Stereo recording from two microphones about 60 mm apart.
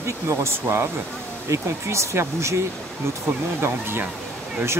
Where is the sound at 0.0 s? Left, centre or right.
Right.